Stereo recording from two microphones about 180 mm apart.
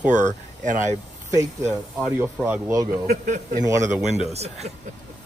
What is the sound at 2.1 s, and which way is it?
Speech, 10° right (ahead or behind).